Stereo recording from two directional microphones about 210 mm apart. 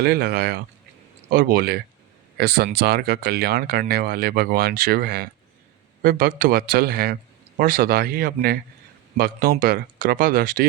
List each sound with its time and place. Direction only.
0.0 s a man's voice: 50° right (ahead or behind)